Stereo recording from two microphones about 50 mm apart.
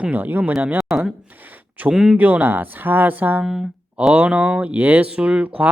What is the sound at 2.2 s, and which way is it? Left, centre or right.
Speech, right.